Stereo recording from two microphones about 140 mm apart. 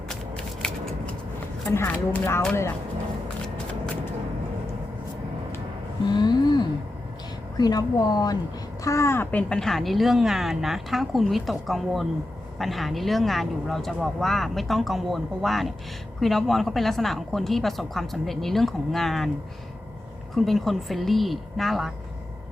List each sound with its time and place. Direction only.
0.6 s a sound: 5° left (ahead or behind)
1.7 s speech: 15° left (ahead or behind)
6.1 s a sound: 30° left (ahead or behind)
7.5 s speech: 30° left (ahead or behind)
9.5 s speech: 5° left (ahead or behind)
20.3 s speech: centre (ahead or behind)